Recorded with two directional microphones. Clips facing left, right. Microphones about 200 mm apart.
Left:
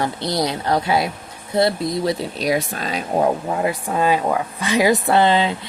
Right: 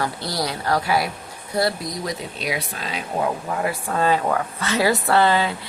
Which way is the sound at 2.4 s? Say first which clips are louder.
Left 7 dB; 45° left (ahead or behind).